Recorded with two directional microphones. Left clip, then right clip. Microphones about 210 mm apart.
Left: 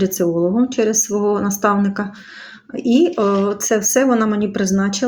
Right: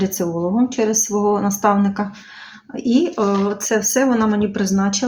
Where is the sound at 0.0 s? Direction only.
15° left (ahead or behind).